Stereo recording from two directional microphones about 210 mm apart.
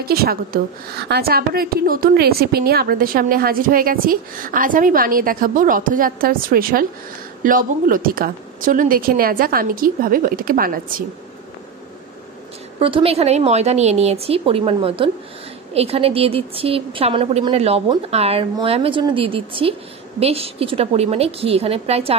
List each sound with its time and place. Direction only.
0.0 s a woman's voice: 45° right (ahead or behind)
12.7 s a woman's voice: 25° right (ahead or behind)